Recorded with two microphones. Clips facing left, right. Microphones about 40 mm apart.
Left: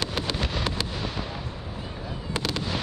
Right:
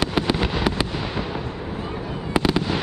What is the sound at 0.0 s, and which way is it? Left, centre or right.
Fireworks, centre.